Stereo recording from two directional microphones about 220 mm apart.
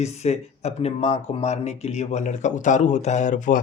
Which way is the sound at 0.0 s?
30° left (ahead or behind).